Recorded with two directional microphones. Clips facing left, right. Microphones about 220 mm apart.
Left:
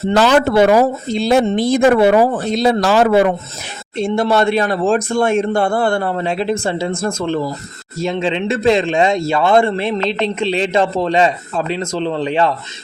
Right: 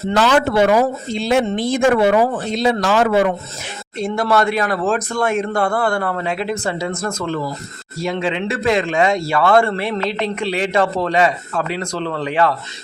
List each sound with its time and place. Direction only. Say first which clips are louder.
0.1 s speech: left 3 dB; 40° left (ahead or behind)